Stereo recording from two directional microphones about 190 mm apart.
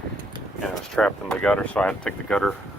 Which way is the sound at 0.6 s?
5° left (ahead or behind).